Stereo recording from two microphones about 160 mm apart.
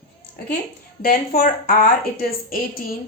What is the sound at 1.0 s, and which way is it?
A woman's voice, 65° left (ahead or behind).